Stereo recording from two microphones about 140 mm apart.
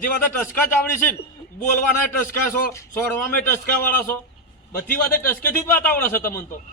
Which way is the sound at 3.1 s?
15° left (ahead or behind).